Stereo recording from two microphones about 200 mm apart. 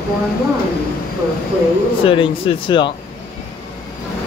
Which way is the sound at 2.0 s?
25° left (ahead or behind).